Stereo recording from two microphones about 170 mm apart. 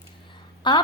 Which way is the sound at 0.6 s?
25° left (ahead or behind).